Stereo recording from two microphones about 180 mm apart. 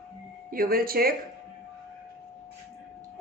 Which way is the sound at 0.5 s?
55° right (ahead or behind).